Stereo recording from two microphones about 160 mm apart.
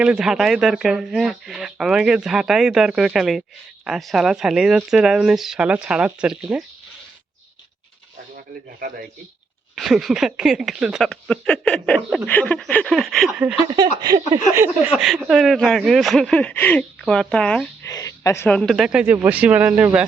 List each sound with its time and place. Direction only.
0.0 s speech: 5° right (ahead or behind)
9.7 s speech: centre (ahead or behind)
13.7 s speech: 25° right (ahead or behind)
14.9 s speech: centre (ahead or behind)
17.8 s speech: 20° left (ahead or behind); by 20.1 s 10° right (ahead or behind)